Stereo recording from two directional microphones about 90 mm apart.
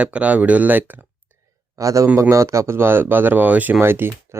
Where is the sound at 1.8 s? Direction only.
40° right (ahead or behind).